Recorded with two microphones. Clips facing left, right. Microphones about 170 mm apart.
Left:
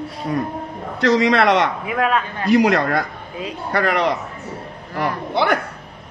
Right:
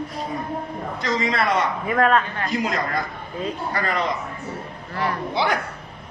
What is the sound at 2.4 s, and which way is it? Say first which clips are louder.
A man's voice: left 9 dB; 70° left (ahead or behind).